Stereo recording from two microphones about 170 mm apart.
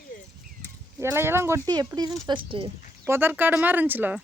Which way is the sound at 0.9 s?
15° right (ahead or behind).